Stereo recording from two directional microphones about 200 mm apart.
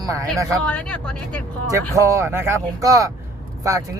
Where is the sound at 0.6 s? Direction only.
5° left (ahead or behind).